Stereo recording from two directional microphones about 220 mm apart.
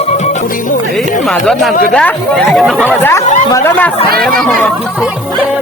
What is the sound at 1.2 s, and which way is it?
Speech, centre (ahead or behind).